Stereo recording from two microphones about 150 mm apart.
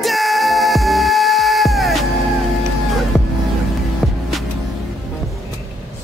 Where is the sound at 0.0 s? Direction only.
Centre (ahead or behind).